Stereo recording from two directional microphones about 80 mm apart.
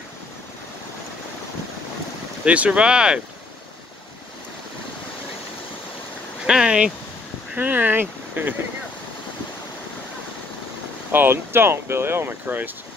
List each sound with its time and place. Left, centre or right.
2.4 s speech: centre
6.4 s speech: centre
7.5 s speech: right
11.1 s speech: right